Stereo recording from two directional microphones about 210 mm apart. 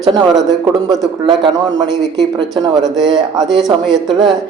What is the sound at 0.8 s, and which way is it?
Speech, 20° right (ahead or behind).